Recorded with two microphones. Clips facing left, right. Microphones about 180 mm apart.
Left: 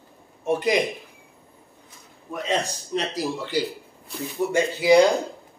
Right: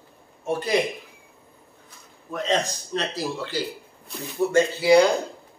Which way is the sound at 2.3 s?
10° left (ahead or behind).